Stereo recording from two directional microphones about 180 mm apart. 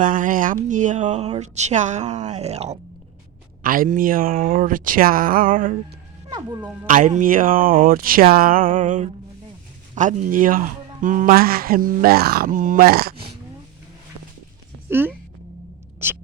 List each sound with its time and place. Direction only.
0.0 s speech: 45° right (ahead or behind)
3.6 s speech: 50° right (ahead or behind)
6.3 s speech: 25° right (ahead or behind)
6.8 s speech: 45° right (ahead or behind)
14.8 s speech: 10° right (ahead or behind)